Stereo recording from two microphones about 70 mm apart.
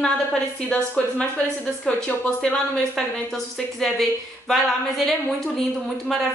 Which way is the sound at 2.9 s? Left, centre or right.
Centre.